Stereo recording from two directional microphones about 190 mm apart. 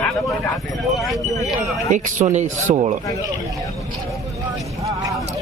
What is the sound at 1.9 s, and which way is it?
Speech, 40° right (ahead or behind).